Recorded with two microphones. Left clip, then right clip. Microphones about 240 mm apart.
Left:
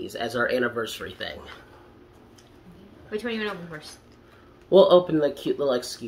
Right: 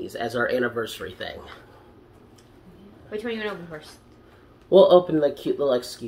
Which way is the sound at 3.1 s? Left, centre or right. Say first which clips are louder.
Even; centre.